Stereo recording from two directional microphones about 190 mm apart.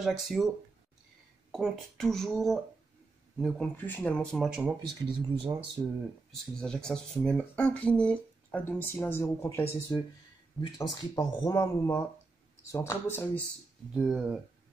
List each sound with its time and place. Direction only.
0.0 s speech: centre (ahead or behind)
1.5 s speech: centre (ahead or behind)
5.0 s speech: 25° right (ahead or behind)
5.8 s speech: 10° right (ahead or behind)
6.3 s speech: 5° left (ahead or behind)
13.9 s speech: 5° right (ahead or behind)